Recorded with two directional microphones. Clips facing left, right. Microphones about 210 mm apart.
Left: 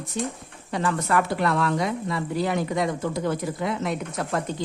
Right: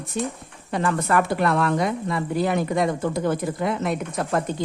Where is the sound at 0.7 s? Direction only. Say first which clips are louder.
Right 2 dB; 50° right (ahead or behind).